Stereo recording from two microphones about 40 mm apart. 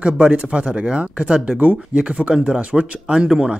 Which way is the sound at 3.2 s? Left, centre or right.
Centre.